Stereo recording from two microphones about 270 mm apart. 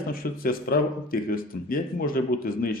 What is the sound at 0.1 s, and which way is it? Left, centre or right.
Speech, left.